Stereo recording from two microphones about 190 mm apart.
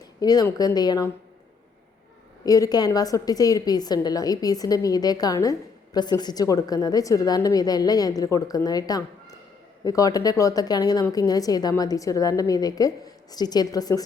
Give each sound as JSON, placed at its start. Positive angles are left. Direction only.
{"t": 0.2, "sound": "a woman's voice", "side_deg": 20}
{"t": 2.4, "sound": "a woman's voice", "side_deg": 20}